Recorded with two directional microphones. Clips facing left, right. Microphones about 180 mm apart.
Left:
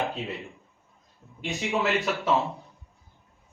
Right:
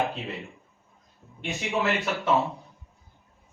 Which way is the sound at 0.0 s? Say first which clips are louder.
Right 1 dB; centre (ahead or behind).